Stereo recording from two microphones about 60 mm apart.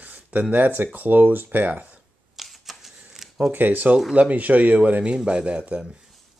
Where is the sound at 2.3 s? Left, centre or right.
Centre.